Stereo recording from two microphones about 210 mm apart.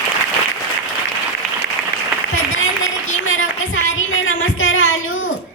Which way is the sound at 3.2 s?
70° left (ahead or behind).